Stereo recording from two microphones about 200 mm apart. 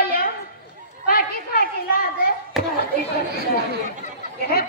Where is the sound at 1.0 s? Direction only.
50° left (ahead or behind).